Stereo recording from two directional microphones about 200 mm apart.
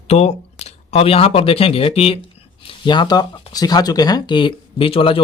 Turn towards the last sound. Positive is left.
turn(degrees=25)  # may be behind; listen again after turning